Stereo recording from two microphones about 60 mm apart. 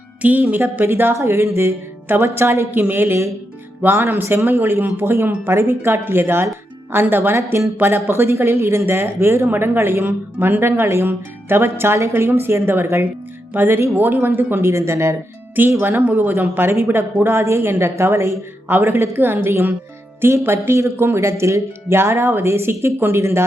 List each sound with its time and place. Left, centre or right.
0.2 s speech: right
0.9 s speech: right
2.7 s speech: right
14.7 s speech: right
15.8 s speech: right
17.4 s speech: right